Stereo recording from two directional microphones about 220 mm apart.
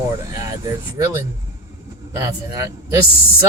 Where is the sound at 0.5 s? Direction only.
15° right (ahead or behind).